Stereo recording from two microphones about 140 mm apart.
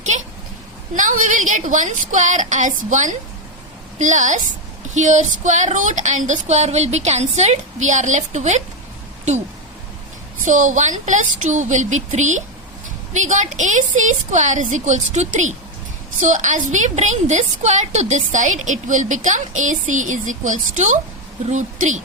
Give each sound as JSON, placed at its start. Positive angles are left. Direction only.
{"t": 0.9, "sound": "a woman's voice", "side_deg": -70}
{"t": 10.4, "sound": "a woman's voice", "side_deg": -65}